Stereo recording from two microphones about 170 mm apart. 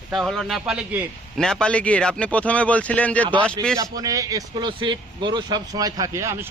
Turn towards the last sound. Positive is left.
turn(degrees=-15)  # may be behind; listen again after turning